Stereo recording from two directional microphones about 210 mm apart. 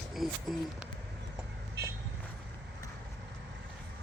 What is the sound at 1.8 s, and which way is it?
Vehicle, 50° right (ahead or behind).